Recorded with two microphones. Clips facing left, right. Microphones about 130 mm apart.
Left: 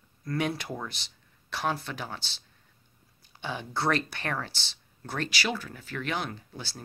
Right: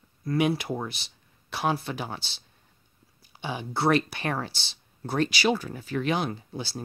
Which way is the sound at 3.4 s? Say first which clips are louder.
Right 4 dB; 10° right (ahead or behind).